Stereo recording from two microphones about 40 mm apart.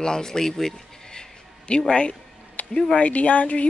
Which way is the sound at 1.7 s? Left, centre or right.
Left.